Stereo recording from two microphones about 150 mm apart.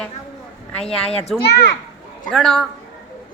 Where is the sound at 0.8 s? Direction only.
45° left (ahead or behind).